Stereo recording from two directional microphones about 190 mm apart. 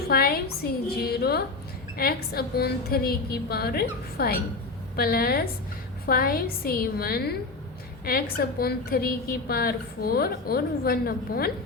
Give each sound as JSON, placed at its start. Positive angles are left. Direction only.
{"t": 0.1, "sound": "a woman's voice", "side_deg": 55}